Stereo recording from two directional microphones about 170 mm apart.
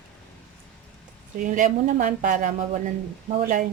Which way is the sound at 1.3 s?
50° right (ahead or behind).